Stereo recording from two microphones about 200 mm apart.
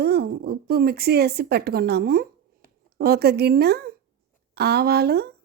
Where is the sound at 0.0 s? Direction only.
50° right (ahead or behind).